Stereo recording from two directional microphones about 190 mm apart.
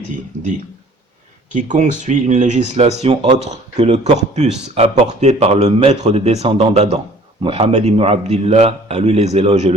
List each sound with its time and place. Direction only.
1.5 s speech: 40° right (ahead or behind)